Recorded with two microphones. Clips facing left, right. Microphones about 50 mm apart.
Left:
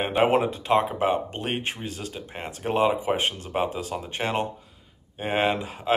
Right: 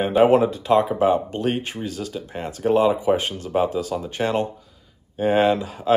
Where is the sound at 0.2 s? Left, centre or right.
Left.